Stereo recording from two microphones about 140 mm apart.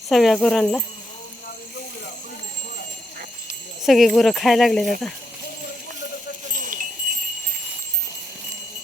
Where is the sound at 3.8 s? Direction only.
Centre (ahead or behind).